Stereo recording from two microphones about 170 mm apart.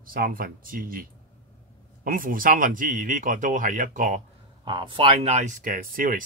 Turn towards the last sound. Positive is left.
turn(degrees=-55)  # may be behind; listen again after turning